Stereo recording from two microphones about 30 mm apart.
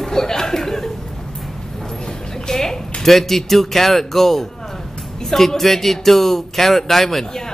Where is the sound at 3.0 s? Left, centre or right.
Centre.